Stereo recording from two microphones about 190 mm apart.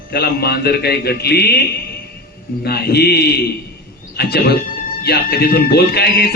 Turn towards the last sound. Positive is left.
turn(degrees=55)  # may be behind; listen again after turning